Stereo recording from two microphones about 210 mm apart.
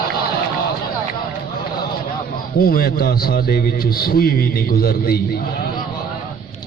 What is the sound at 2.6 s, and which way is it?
A man's voice, 45° left (ahead or behind).